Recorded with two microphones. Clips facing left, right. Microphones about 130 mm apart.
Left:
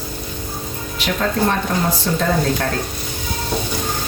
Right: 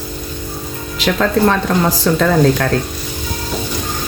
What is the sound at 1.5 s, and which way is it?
A woman's voice, 90° right.